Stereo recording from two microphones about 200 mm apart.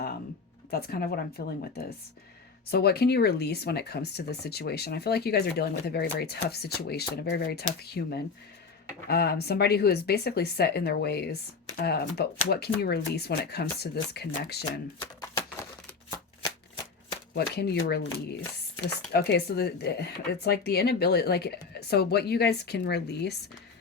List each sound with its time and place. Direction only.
0.7 s speech: 50° left (ahead or behind)
17.3 s speech: 55° left (ahead or behind)
19.1 s speech: 55° left (ahead or behind)